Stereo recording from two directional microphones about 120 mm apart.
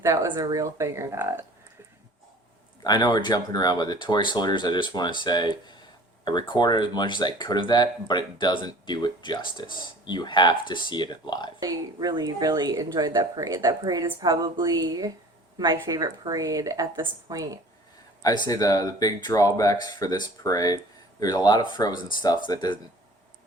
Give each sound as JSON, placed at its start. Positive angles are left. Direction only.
{"t": 0.0, "sound": "speech", "side_deg": -25}
{"t": 2.8, "sound": "speech", "side_deg": 35}
{"t": 11.6, "sound": "speech", "side_deg": -30}
{"t": 18.2, "sound": "speech", "side_deg": 30}